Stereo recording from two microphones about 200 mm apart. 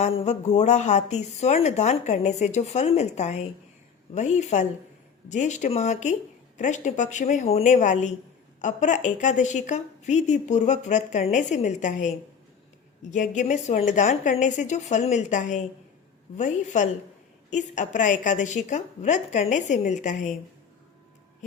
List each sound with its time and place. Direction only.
0.3 s speech: 35° left (ahead or behind)